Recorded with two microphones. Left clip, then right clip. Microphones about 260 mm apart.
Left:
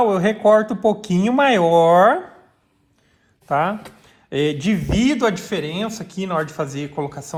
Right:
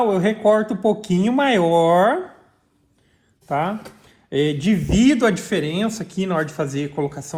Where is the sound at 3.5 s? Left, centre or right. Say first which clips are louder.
Left 3 dB; left.